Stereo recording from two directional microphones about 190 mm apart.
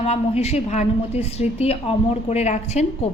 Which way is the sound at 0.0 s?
35° left (ahead or behind).